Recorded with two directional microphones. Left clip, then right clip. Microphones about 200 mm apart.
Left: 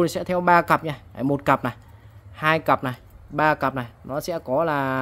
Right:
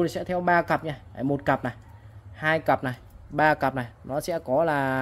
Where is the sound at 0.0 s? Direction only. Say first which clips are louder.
Left 4 dB; 20° left (ahead or behind).